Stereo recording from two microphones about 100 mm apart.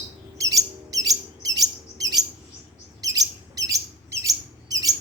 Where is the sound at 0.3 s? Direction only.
35° right (ahead or behind).